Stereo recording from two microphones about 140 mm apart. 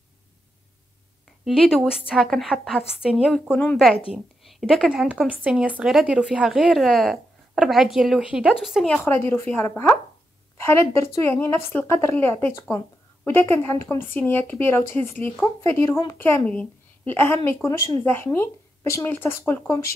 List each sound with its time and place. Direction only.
1.4 s a woman's voice: centre (ahead or behind)
9.0 s a woman's voice: 15° left (ahead or behind)